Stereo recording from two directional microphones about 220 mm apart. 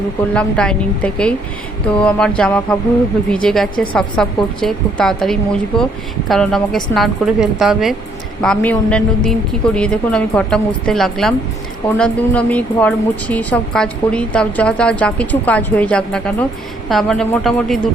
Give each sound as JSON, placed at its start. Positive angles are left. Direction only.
{"t": 0.3, "sound": "speech", "side_deg": 5}